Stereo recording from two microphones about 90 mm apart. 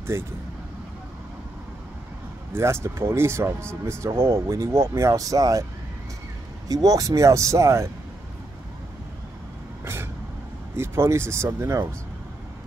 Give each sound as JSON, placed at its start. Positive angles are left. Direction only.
{"t": 0.0, "sound": "speech", "side_deg": -30}
{"t": 2.5, "sound": "speech", "side_deg": -30}
{"t": 6.7, "sound": "speech", "side_deg": -40}
{"t": 10.8, "sound": "speech", "side_deg": -30}